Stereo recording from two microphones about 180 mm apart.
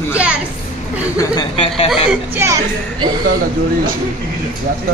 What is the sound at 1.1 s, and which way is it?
Speech, 25° left (ahead or behind).